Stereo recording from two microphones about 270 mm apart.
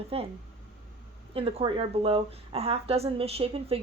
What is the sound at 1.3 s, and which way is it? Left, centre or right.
A woman's voice, right.